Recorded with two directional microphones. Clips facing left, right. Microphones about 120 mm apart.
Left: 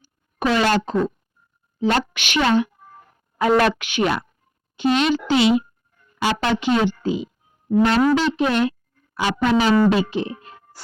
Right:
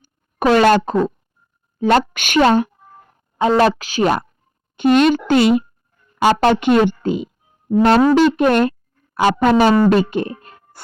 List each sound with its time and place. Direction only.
0.3 s a woman's voice: 50° right (ahead or behind)
3.3 s speech: 30° right (ahead or behind)
4.8 s a woman's voice: 50° right (ahead or behind)